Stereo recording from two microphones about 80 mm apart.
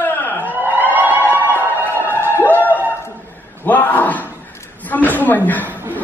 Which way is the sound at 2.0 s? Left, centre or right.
Left.